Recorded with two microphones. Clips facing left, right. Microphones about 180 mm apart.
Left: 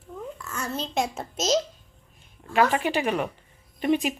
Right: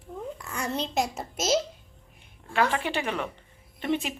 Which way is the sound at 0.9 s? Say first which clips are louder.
Left 1 dB; centre (ahead or behind).